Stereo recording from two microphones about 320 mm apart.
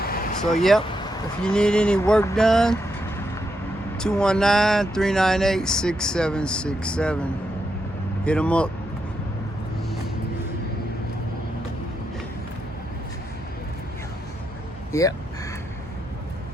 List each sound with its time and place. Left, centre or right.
0.0 s a sound: left
0.9 s vehicle: centre
1.4 s speech: centre
3.9 s speech: centre
14.9 s speech: centre